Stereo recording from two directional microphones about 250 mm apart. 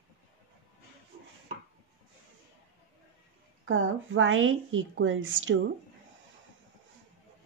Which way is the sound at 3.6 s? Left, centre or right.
Right.